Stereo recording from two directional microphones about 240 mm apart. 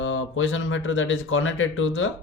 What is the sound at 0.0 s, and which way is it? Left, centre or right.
Speech, left.